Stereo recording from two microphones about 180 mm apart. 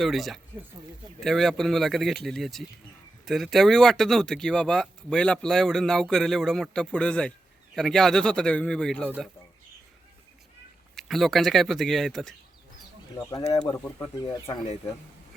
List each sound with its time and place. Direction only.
0.0 s speech: centre (ahead or behind)
9.0 s speech: 10° right (ahead or behind)
10.9 s speech: centre (ahead or behind)
14.2 s speech: 20° left (ahead or behind)